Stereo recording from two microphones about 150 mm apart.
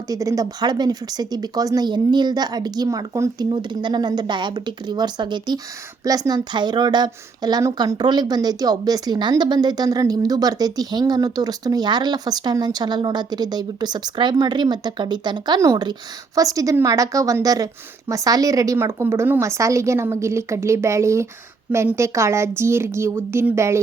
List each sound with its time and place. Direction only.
0.1 s a woman's voice: 20° right (ahead or behind)